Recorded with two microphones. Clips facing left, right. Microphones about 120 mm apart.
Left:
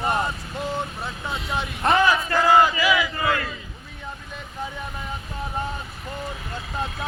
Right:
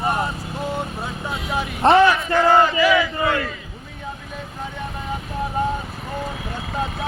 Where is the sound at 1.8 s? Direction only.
30° right (ahead or behind).